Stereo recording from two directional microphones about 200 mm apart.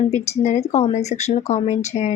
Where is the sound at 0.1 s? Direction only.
35° left (ahead or behind).